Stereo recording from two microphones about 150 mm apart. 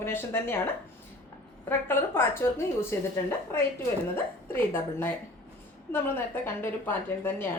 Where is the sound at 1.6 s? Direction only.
15° left (ahead or behind).